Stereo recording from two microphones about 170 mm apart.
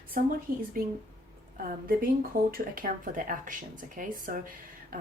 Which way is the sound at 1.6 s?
55° right (ahead or behind).